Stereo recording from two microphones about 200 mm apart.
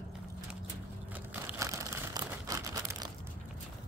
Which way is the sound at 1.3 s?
10° right (ahead or behind).